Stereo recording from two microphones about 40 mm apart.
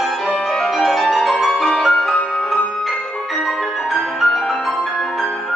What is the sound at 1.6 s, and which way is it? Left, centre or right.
Music, centre.